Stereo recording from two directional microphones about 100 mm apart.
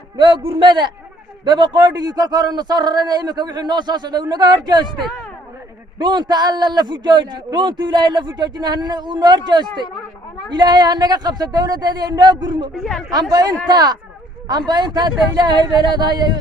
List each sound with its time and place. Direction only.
0.2 s a man's voice: 50° right (ahead or behind)
4.9 s speech: centre (ahead or behind)
6.0 s a man's voice: 45° right (ahead or behind)
12.7 s speech: 5° left (ahead or behind)
13.3 s a man's voice: 40° right (ahead or behind)